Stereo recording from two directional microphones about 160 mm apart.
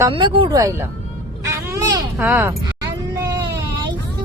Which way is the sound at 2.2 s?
10° right (ahead or behind).